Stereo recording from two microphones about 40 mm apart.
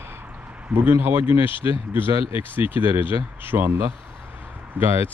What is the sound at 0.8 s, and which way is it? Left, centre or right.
Speech, right.